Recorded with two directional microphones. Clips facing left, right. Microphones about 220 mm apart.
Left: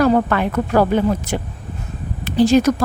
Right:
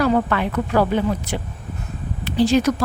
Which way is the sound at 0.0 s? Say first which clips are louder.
Left 3 dB; 45° left (ahead or behind).